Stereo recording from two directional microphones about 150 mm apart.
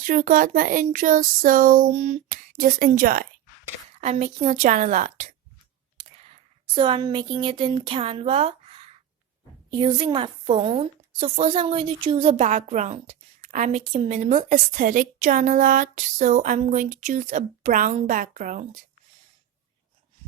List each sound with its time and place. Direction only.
0.1 s a woman's voice: 60° right (ahead or behind)
4.0 s a woman's voice: 50° right (ahead or behind)
6.7 s a woman's voice: 35° right (ahead or behind)
9.7 s a woman's voice: 30° right (ahead or behind)
12.4 s a woman's voice: 50° right (ahead or behind)